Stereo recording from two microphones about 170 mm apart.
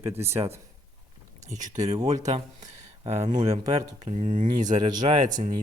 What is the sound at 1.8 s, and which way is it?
Speech, 40° right (ahead or behind).